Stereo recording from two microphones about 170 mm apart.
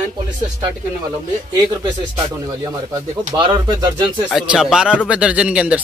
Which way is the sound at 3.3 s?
25° right (ahead or behind).